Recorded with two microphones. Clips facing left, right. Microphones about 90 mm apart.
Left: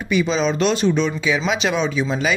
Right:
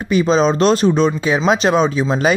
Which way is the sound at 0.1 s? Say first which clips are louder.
Right 5 dB; 40° right (ahead or behind).